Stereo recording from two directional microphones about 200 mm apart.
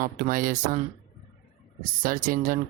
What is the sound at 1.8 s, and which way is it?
Speech, 45° right (ahead or behind).